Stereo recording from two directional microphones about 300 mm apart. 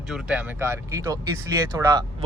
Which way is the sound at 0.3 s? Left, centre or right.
Centre.